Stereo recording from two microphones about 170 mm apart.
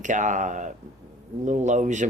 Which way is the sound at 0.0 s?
45° right (ahead or behind).